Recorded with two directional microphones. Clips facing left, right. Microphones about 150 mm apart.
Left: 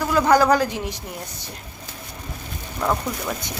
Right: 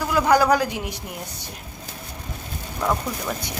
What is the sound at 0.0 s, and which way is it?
Speech, 10° right (ahead or behind).